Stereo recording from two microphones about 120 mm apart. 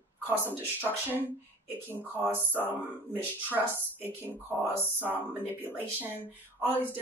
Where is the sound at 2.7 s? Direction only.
15° right (ahead or behind).